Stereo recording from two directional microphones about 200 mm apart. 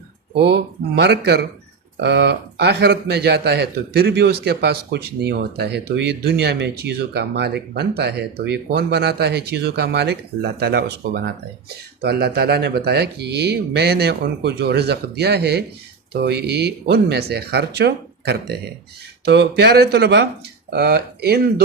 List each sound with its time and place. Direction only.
0.3 s speech: 55° right (ahead or behind)